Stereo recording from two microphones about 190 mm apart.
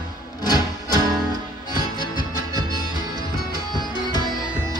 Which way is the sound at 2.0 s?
20° left (ahead or behind).